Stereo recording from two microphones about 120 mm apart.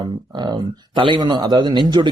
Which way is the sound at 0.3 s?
35° right (ahead or behind).